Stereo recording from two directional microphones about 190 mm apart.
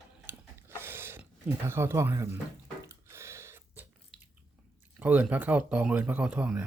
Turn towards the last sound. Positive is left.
turn(degrees=-5)  # may be behind; listen again after turning